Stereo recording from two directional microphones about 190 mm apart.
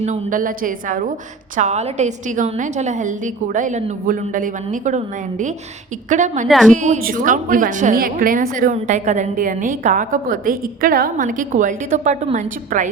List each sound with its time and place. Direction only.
0.0 s a woman's voice: 40° right (ahead or behind)
6.5 s a woman's voice: centre (ahead or behind)
6.7 s a woman's voice: 40° right (ahead or behind)